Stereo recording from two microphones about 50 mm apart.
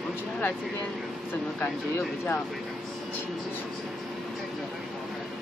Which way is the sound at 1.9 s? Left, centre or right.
Left.